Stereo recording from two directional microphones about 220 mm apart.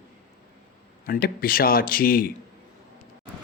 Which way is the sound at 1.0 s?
40° left (ahead or behind).